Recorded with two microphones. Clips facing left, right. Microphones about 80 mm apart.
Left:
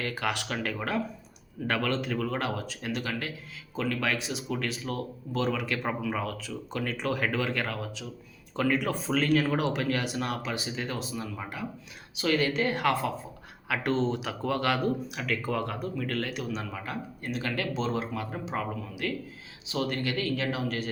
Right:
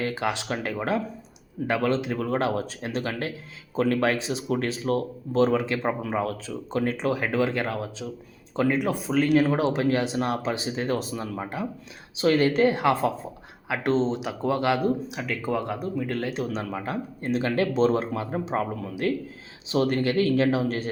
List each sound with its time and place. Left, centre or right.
0.0 s speech: right
11.3 s speech: right
12.6 s speech: right
16.4 s speech: right